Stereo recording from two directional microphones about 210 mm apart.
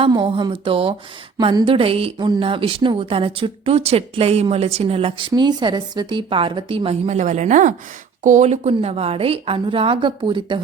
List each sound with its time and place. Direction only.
0.0 s a woman's voice: 25° right (ahead or behind)